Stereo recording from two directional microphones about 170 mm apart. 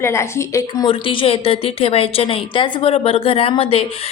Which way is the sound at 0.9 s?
30° left (ahead or behind).